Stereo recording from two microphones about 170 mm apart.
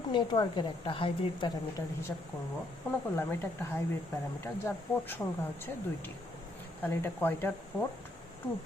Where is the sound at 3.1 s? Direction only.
15° left (ahead or behind).